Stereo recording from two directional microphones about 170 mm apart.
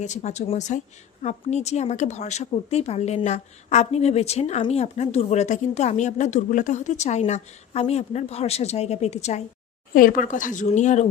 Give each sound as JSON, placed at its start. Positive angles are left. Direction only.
{"t": 0.0, "sound": "speech", "side_deg": 45}
{"t": 9.9, "sound": "speech", "side_deg": 55}